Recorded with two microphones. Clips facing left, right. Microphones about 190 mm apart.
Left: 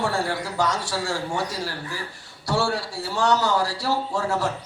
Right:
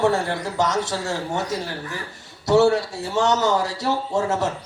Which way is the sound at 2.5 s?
20° right (ahead or behind).